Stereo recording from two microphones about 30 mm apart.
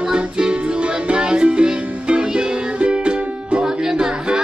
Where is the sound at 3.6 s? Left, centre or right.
Centre.